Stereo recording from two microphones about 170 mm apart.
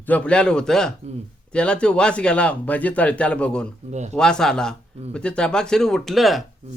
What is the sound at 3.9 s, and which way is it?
Speech, 40° right (ahead or behind).